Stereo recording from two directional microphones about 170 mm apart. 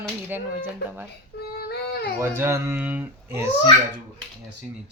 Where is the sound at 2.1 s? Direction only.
15° right (ahead or behind).